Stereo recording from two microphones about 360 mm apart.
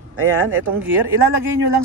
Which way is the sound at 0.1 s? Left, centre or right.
Right.